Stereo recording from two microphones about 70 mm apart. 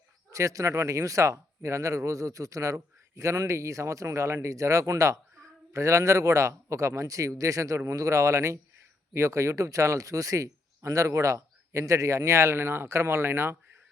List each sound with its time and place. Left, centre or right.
0.3 s speech: right